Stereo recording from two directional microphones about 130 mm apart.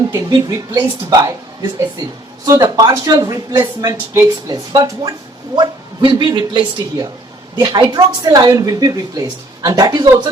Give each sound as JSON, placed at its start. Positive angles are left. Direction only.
{"t": 0.3, "sound": "speech", "side_deg": -35}
{"t": 2.5, "sound": "a woman's voice", "side_deg": -25}